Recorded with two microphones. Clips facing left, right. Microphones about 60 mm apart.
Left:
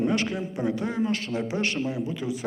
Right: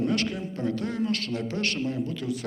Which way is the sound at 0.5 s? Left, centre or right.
Centre.